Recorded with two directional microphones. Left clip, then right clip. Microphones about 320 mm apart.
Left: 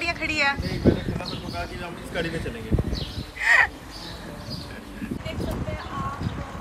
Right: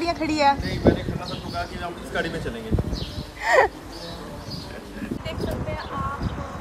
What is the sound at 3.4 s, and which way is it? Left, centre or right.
Speech, centre.